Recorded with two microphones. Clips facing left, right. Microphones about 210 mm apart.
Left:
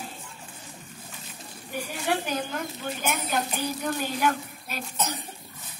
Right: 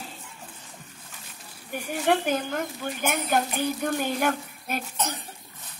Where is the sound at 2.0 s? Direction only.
50° right (ahead or behind).